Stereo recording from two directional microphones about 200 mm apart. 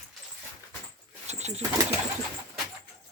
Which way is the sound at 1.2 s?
35° right (ahead or behind).